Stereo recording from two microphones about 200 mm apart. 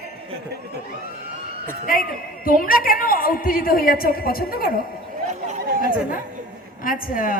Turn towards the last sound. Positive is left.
turn(degrees=45)  # may be behind; listen again after turning